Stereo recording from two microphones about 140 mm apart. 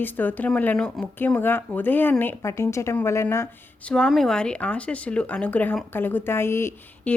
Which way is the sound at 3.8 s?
5° left (ahead or behind).